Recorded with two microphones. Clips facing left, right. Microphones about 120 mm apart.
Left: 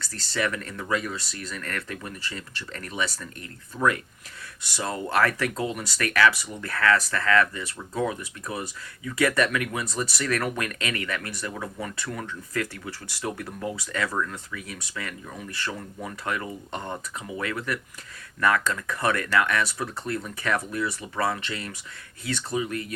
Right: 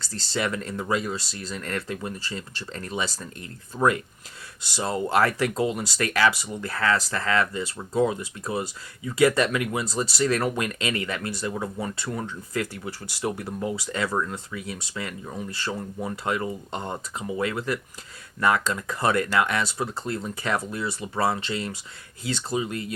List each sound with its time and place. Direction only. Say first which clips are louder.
0.0 s speech: even; 30° right (ahead or behind)